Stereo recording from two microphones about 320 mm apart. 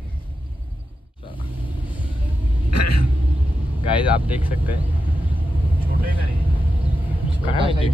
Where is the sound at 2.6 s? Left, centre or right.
Left.